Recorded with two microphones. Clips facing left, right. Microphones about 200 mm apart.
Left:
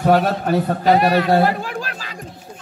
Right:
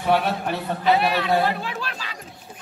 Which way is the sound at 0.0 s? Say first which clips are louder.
Left 5 dB; 45° left (ahead or behind).